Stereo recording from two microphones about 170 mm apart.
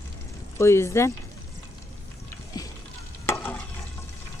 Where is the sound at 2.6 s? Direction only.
25° left (ahead or behind).